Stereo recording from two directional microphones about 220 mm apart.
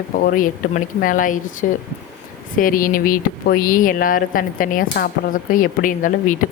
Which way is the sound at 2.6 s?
40° left (ahead or behind).